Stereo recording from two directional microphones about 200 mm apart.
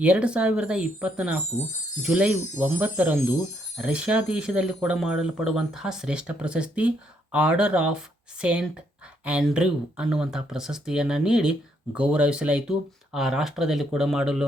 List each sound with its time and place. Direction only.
0.0 s speech: 5° right (ahead or behind)